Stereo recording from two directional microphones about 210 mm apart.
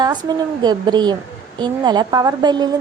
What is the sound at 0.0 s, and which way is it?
A woman's voice, 20° right (ahead or behind).